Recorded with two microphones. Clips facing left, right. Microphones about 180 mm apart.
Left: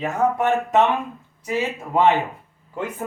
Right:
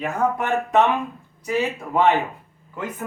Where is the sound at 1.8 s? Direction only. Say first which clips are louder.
Left 2 dB; 15° left (ahead or behind).